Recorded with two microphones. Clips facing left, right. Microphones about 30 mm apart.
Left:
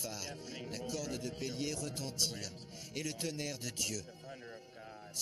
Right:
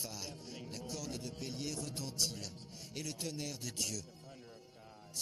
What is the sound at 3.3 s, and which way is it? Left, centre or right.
Speech, left.